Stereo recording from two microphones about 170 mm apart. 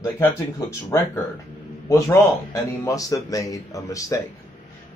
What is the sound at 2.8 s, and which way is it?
Speech, 20° left (ahead or behind).